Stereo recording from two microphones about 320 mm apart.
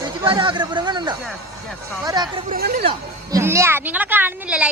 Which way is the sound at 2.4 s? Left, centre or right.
Right.